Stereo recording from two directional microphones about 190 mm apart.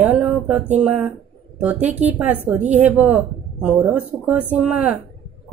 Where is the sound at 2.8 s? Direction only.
10° right (ahead or behind).